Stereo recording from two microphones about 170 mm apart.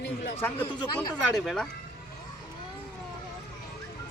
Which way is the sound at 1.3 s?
Centre (ahead or behind).